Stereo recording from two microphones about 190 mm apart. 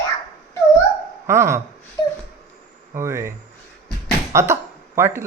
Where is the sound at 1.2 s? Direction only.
15° right (ahead or behind).